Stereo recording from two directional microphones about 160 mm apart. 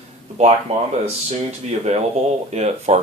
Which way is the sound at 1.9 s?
40° right (ahead or behind).